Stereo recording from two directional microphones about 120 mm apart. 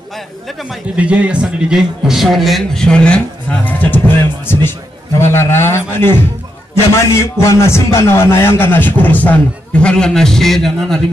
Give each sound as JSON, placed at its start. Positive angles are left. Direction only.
{"t": 0.9, "sound": "a man's voice", "side_deg": -10}